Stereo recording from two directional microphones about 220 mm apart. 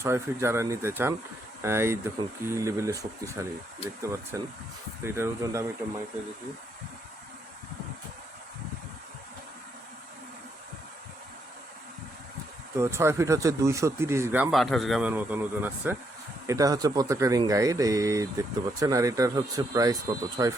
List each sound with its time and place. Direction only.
0.0 s speech: 10° right (ahead or behind)
12.7 s speech: 10° right (ahead or behind)